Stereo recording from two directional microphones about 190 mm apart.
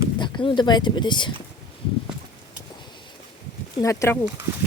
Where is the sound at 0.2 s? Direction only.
25° left (ahead or behind).